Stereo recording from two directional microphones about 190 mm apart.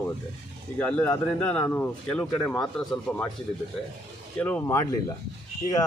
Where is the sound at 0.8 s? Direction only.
5° left (ahead or behind).